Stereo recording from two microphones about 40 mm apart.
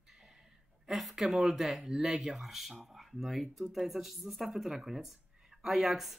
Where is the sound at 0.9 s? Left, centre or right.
Centre.